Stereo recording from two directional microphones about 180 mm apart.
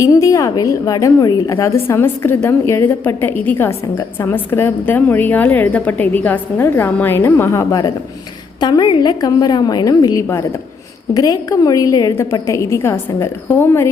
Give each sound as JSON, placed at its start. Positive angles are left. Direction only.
{"t": 0.0, "sound": "a woman's voice", "side_deg": 20}